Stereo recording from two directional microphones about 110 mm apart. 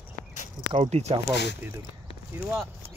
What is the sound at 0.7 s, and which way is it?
Speech, 75° right (ahead or behind).